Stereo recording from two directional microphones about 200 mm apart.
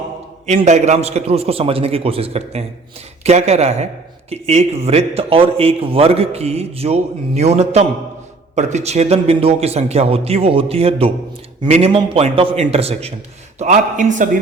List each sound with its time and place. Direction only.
0.4 s a man's voice: 35° right (ahead or behind)